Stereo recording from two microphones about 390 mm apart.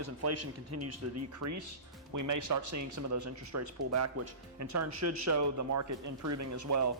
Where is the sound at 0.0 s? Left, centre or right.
Right.